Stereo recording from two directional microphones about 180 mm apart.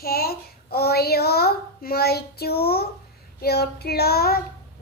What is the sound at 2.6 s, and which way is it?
Child singing, 60° left (ahead or behind).